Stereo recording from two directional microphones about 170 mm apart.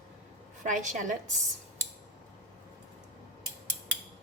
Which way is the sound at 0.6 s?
45° right (ahead or behind).